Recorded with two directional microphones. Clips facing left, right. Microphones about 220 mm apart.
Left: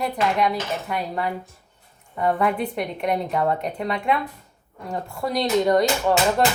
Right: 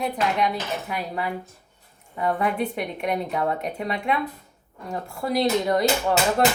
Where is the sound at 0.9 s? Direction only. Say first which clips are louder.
Left 2 dB; 5° right (ahead or behind).